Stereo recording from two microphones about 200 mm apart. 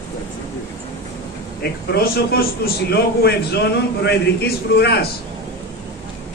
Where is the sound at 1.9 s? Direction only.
50° left (ahead or behind).